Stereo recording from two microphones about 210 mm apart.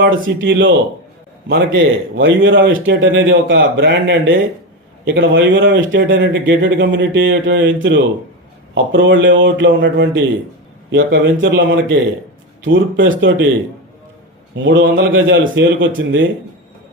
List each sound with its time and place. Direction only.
0.0 s speech: 60° right (ahead or behind)
14.5 s speech: 65° right (ahead or behind)